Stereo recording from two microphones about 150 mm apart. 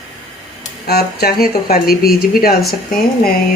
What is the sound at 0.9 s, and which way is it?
Speech, 90° left.